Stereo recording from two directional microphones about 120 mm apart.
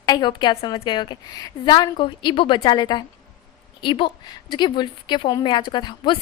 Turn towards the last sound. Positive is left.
turn(degrees=40)  # may be behind; listen again after turning